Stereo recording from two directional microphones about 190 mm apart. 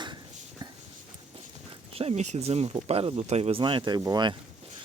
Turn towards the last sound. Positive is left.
turn(degrees=-20)  # may be behind; listen again after turning